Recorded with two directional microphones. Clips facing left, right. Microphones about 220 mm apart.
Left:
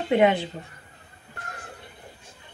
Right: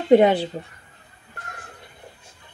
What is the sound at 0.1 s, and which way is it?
Speech, 35° right (ahead or behind).